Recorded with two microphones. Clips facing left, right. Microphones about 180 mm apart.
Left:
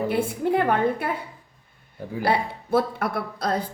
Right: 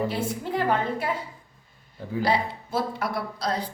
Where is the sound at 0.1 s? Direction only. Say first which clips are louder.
Left 6 dB; 55° left (ahead or behind).